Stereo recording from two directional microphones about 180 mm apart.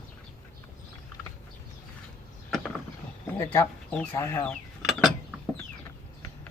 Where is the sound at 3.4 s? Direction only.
20° left (ahead or behind).